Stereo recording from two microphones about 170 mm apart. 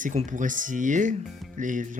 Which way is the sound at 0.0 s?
45° right (ahead or behind).